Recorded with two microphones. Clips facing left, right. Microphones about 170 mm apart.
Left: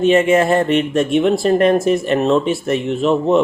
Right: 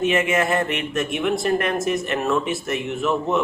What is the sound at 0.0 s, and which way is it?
Speech, 30° left (ahead or behind).